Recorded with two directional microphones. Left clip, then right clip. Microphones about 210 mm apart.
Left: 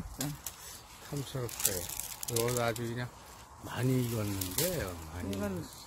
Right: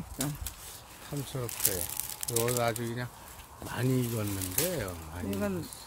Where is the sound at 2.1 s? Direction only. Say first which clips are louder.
Right 2 dB; 20° right (ahead or behind).